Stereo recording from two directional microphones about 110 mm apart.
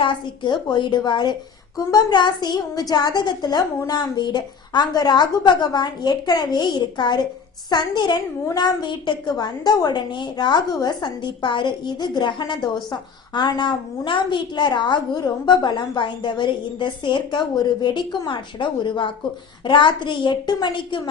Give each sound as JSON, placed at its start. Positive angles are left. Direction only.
{"t": 0.0, "sound": "a woman's voice", "side_deg": 45}